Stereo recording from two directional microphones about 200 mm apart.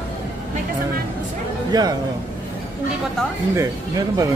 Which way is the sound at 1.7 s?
20° right (ahead or behind).